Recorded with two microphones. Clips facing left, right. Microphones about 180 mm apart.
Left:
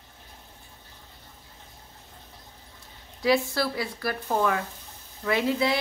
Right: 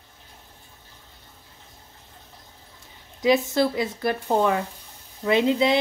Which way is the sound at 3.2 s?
20° right (ahead or behind).